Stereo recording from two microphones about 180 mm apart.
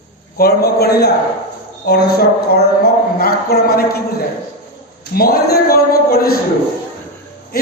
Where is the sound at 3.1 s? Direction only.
55° left (ahead or behind).